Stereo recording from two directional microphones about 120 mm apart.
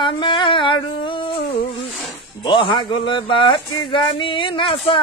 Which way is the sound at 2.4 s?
40° left (ahead or behind).